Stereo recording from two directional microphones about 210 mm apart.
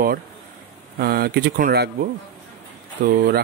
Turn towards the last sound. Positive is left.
turn(degrees=-45)  # may be behind; listen again after turning